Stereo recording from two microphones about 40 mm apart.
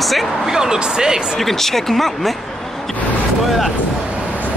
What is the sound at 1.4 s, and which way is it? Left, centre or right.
Speech, centre.